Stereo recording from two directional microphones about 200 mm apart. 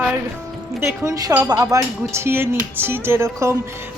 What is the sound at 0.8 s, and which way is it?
Speech, 15° right (ahead or behind).